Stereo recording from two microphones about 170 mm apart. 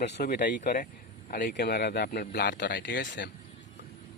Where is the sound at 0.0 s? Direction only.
65° left (ahead or behind); by 3.2 s 90° left.